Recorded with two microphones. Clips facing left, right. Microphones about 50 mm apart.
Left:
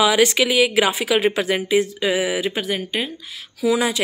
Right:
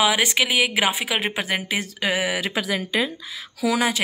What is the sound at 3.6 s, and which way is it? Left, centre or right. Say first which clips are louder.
Speech: left 3 dB; right.